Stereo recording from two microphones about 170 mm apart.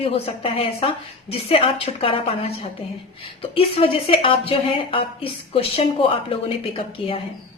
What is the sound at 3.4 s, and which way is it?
A woman's voice, 35° left (ahead or behind).